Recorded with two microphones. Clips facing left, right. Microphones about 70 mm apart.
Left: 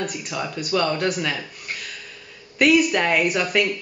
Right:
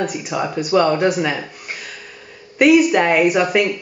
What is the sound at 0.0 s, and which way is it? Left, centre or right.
Speech, centre.